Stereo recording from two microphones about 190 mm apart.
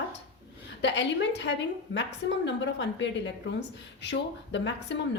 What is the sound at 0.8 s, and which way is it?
A woman's voice, 70° left (ahead or behind).